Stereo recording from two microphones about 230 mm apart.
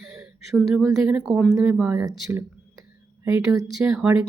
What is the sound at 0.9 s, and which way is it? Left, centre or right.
Speech, centre.